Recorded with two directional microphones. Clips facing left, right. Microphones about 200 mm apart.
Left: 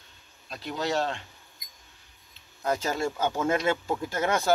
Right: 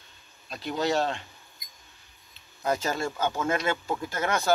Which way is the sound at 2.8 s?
10° left (ahead or behind).